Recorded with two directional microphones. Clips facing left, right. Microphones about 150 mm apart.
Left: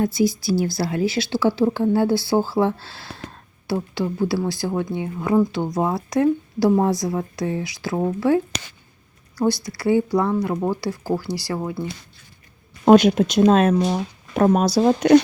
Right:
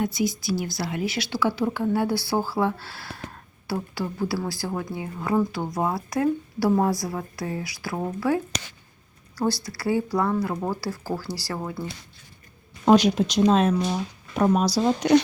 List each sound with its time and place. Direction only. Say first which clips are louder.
0.0 s speech: left 5 dB; 35° left (ahead or behind)
9.7 s speech: left 7 dB; 25° left (ahead or behind)
12.8 s speech: left 5 dB; 55° left (ahead or behind)